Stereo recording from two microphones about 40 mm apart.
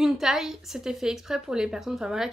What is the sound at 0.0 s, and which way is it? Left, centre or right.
Speech, centre.